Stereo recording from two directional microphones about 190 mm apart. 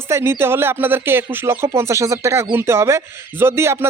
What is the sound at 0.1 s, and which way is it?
Music, 15° right (ahead or behind).